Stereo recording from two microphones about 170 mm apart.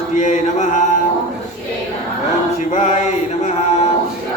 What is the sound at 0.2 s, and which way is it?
Mantra, 45° left (ahead or behind).